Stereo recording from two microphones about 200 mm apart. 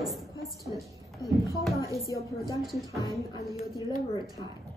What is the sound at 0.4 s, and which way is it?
Music, 15° right (ahead or behind).